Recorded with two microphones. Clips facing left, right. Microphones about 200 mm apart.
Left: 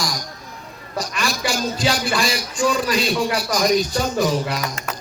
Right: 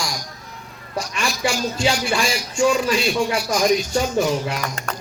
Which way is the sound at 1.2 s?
35° left (ahead or behind).